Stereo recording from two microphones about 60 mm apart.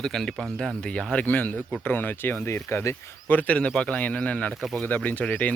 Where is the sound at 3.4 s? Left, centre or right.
Left.